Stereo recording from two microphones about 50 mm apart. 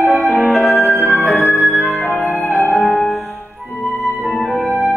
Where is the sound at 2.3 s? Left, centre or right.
Left.